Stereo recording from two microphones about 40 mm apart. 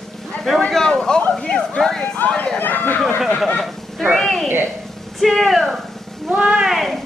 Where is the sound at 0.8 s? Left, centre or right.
Centre.